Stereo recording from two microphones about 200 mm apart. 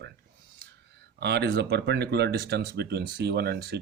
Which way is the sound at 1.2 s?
55° right (ahead or behind).